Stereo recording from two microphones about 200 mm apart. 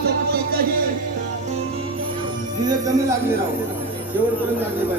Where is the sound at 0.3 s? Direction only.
50° right (ahead or behind).